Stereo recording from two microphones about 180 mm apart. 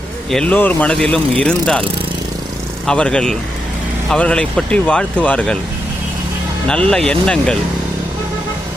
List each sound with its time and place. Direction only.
0.3 s speech: 5° left (ahead or behind)
2.8 s speech: 5° left (ahead or behind)
6.7 s speech: 5° left (ahead or behind)